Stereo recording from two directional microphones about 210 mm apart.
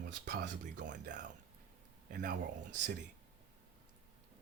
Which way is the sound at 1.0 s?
35° right (ahead or behind).